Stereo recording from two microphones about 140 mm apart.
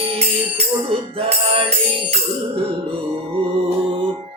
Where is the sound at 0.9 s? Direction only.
40° right (ahead or behind).